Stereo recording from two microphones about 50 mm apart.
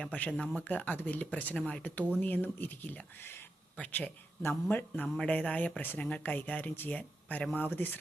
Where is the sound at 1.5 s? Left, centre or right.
Centre.